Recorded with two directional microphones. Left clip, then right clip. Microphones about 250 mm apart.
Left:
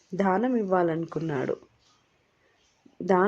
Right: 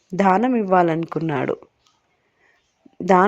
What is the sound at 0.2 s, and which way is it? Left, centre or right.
Speech, right.